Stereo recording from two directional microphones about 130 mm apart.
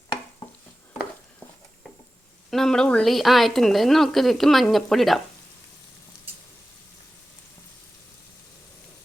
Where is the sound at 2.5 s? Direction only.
5° left (ahead or behind).